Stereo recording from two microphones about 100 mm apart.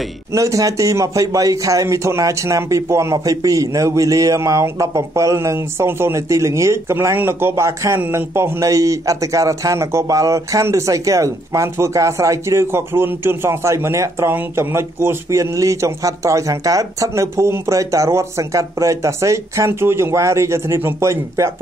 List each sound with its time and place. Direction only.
0.3 s a man's voice: 35° right (ahead or behind)